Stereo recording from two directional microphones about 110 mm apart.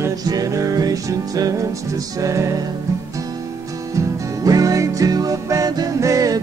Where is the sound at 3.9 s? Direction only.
35° right (ahead or behind).